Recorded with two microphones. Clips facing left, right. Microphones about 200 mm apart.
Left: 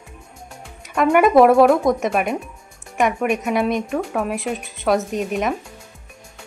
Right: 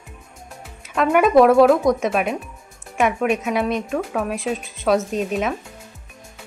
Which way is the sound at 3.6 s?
15° left (ahead or behind).